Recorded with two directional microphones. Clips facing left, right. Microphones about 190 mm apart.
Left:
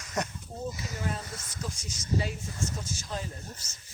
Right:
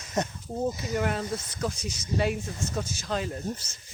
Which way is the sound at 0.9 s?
75° right (ahead or behind).